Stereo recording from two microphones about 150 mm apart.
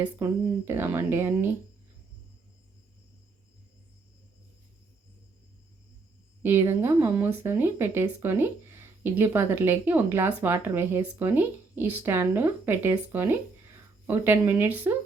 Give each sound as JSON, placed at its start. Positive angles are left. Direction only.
{"t": 0.0, "sound": "speech", "side_deg": -15}
{"t": 6.4, "sound": "speech", "side_deg": -15}